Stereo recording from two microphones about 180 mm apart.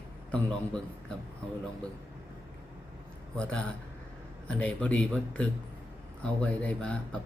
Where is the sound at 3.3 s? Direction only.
5° left (ahead or behind).